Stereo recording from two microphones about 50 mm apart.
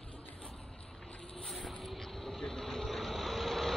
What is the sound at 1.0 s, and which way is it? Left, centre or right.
Boat, centre.